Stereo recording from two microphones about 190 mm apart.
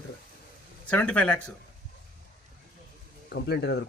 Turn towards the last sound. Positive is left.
turn(degrees=60)  # may be behind; listen again after turning